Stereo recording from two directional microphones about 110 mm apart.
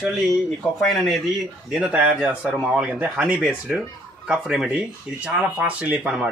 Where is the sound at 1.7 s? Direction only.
10° right (ahead or behind).